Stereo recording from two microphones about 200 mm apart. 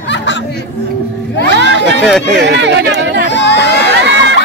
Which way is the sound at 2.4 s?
60° right (ahead or behind).